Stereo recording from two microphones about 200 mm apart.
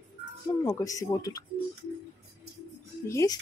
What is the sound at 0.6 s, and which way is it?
Speech, 15° left (ahead or behind).